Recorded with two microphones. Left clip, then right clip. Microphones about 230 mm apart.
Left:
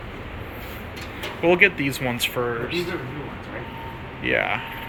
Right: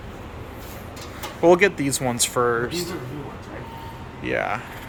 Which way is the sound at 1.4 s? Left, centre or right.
Centre.